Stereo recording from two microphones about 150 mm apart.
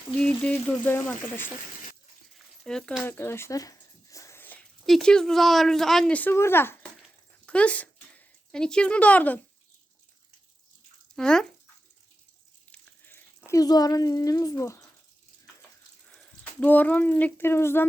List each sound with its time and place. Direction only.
0.2 s speech: 5° left (ahead or behind)
2.6 s a sound: 5° left (ahead or behind)
4.9 s speech: 5° left (ahead or behind)
11.1 s speech: 5° left (ahead or behind)
12.7 s a sound: 15° left (ahead or behind)
13.6 s speech: 25° left (ahead or behind)
16.0 s speech: 5° left (ahead or behind)